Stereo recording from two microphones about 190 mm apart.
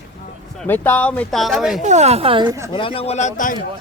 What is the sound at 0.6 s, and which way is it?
Speech, 10° left (ahead or behind).